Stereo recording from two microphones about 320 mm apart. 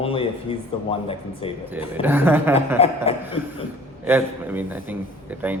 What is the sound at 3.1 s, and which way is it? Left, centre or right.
Speech, centre.